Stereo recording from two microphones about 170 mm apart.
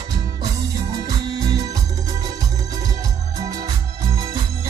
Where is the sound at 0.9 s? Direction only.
25° right (ahead or behind).